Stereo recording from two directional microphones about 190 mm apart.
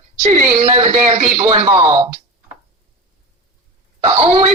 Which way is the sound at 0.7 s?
30° right (ahead or behind).